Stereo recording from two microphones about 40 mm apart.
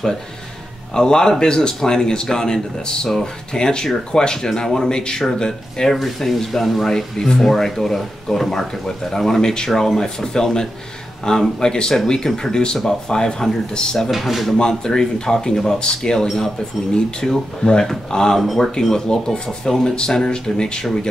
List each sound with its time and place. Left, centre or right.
0.9 s speech: centre
5.9 s speech: centre
14.1 s speech: centre
14.6 s speech: centre
18.4 s speech: centre
18.8 s speech: centre